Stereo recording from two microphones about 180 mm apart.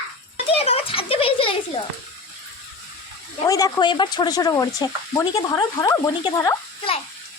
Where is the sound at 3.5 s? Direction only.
20° left (ahead or behind).